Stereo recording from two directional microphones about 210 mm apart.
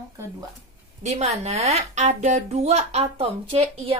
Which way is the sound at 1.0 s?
30° right (ahead or behind).